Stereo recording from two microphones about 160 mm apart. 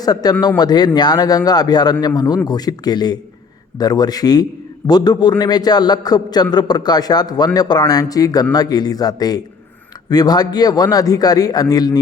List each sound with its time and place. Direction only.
0.0 s a man's voice: 25° left (ahead or behind)